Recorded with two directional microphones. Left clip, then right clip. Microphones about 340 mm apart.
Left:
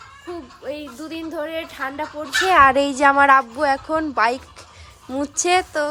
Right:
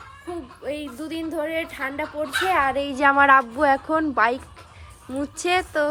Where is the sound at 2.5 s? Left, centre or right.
Left.